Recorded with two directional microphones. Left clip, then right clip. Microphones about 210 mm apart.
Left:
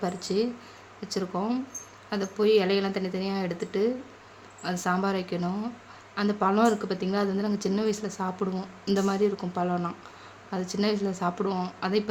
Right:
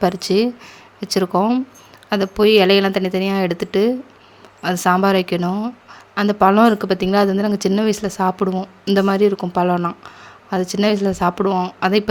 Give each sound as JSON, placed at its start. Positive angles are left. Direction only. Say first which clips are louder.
{"t": 0.0, "sound": "speech", "louder": "right 11 dB", "side_deg": -45}